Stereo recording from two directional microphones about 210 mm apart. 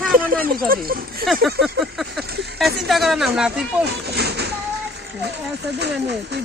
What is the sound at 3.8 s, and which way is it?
Speech, 50° right (ahead or behind).